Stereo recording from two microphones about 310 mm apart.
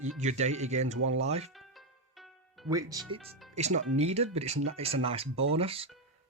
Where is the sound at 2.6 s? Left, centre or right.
Centre.